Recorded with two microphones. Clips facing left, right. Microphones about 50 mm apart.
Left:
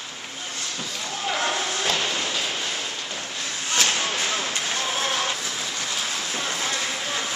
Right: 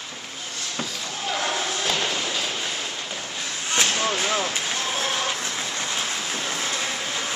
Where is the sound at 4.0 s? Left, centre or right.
Centre.